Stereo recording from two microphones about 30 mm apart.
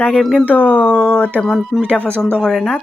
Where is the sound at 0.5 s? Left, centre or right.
Left.